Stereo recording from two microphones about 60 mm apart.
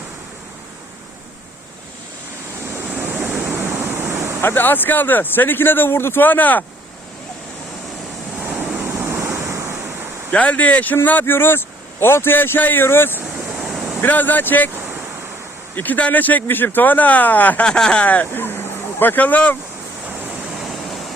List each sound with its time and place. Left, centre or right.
2.8 s waves: right
4.4 s speech: left
9.0 s waves: right
10.3 s speech: left
13.4 s waves: centre
14.0 s speech: left
15.7 s speech: left
17.7 s speech: centre
18.0 s speech: left